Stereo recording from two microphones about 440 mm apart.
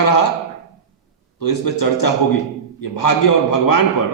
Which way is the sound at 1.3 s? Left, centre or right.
Left.